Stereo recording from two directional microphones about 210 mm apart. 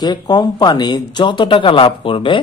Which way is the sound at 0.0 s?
20° left (ahead or behind).